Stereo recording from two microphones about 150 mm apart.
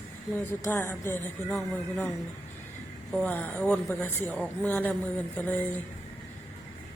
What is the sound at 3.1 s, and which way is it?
Speech, 10° left (ahead or behind).